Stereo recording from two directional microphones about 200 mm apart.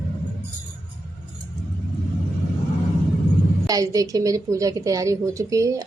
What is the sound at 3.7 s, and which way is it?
A woman's voice, 15° right (ahead or behind).